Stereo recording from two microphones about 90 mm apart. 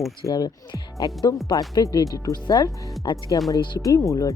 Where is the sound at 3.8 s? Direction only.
40° left (ahead or behind).